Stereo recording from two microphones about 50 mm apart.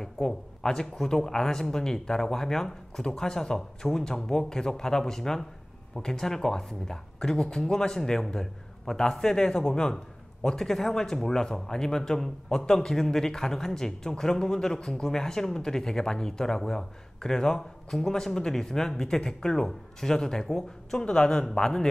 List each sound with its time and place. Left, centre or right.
0.0 s speech: centre